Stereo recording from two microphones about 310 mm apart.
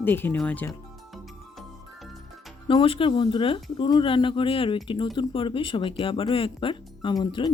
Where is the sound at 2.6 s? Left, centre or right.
Centre.